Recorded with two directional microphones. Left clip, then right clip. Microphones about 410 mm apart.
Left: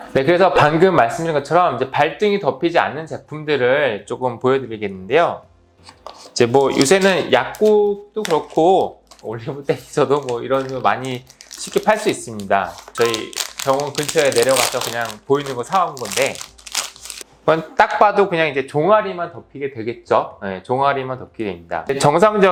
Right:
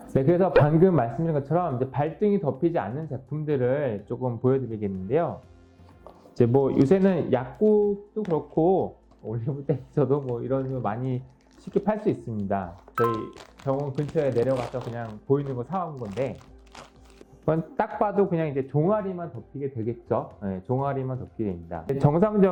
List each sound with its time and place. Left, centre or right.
0.0 s speech: centre
7.8 s speech: centre
8.2 s speech: centre